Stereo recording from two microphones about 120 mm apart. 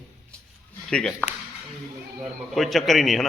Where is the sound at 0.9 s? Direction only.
10° left (ahead or behind).